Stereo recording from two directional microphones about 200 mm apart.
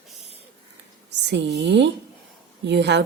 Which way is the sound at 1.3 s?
60° right (ahead or behind).